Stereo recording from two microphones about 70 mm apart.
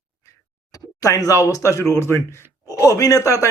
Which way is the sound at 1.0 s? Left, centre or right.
Left.